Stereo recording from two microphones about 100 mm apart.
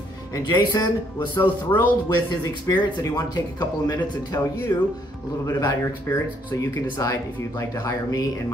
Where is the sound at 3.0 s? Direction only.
45° left (ahead or behind).